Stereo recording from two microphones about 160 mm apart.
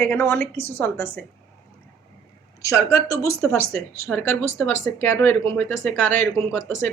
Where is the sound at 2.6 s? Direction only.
20° left (ahead or behind).